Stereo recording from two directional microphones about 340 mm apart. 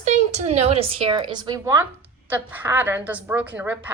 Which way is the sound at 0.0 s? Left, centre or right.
Centre.